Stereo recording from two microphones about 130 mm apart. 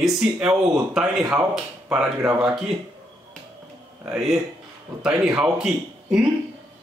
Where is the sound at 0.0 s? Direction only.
Centre (ahead or behind).